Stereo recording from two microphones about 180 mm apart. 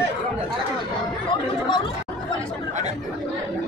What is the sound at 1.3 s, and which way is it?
Chatter, 25° left (ahead or behind).